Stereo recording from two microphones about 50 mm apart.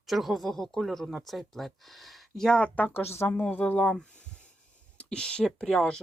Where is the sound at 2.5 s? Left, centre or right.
Left.